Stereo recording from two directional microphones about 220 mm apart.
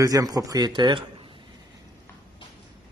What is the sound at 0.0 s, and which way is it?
Speech, 15° right (ahead or behind).